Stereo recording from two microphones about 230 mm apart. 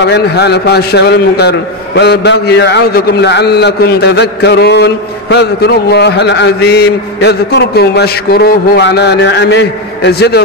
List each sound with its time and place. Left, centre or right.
0.0 s a man's voice: left